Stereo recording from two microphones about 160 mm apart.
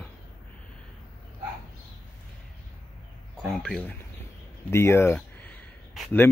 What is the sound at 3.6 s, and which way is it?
Speech, 5° left (ahead or behind).